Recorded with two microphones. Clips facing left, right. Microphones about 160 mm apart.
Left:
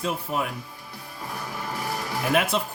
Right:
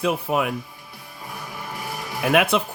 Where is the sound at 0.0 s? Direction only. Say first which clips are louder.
Right 5 dB; 70° right (ahead or behind).